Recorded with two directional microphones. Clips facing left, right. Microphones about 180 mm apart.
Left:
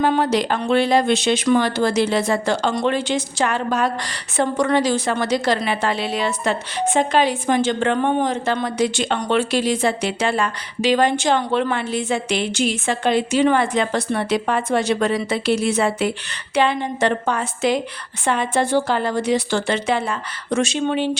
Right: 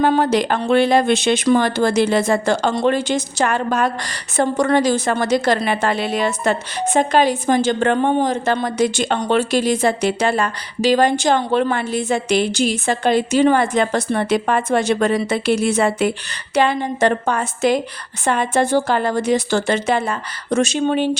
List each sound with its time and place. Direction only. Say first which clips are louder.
0.1 s a woman's voice: right 2 dB; 50° right (ahead or behind)